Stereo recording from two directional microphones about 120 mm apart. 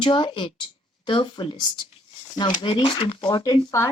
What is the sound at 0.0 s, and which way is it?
Speech, 40° left (ahead or behind).